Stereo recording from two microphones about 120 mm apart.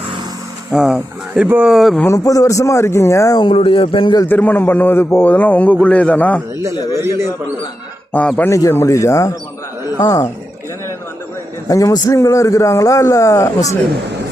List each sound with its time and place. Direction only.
0.7 s speech: 5° right (ahead or behind)
1.7 s speech: centre (ahead or behind)
2.0 s a man's voice: 25° left (ahead or behind)
3.3 s a man's voice: 45° left (ahead or behind)
4.3 s a man's voice: 15° left (ahead or behind)
6.9 s a man's voice: 20° right (ahead or behind)
8.1 s a man's voice: 15° left (ahead or behind)
8.5 s a man's voice: 25° left (ahead or behind)
11.7 s a man's voice: 25° left (ahead or behind)